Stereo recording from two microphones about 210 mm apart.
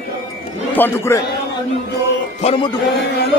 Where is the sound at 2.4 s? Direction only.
30° left (ahead or behind).